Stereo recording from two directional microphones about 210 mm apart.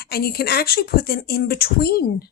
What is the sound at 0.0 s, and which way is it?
Speech, 45° left (ahead or behind).